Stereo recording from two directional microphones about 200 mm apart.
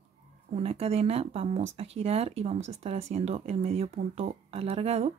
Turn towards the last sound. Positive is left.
turn(degrees=-30)  # may be behind; listen again after turning